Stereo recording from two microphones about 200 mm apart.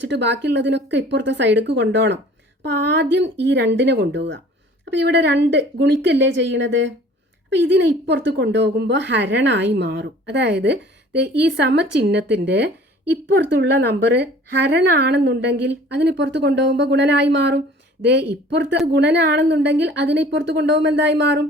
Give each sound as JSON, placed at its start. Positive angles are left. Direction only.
{"t": 0.0, "sound": "a woman's voice", "side_deg": -60}